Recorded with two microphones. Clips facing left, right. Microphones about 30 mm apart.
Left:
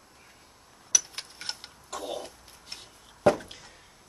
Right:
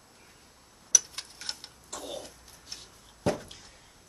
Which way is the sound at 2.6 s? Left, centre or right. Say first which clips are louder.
Left 2 dB; left.